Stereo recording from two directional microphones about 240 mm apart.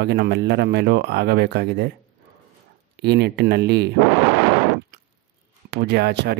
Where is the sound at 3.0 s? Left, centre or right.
Right.